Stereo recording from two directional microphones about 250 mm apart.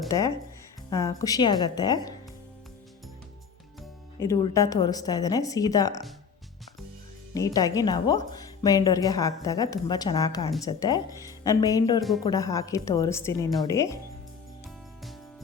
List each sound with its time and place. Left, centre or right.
0.1 s a woman's voice: centre
4.2 s a woman's voice: centre
7.3 s a woman's voice: centre